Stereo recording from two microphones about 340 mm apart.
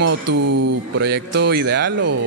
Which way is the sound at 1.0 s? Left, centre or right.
Right.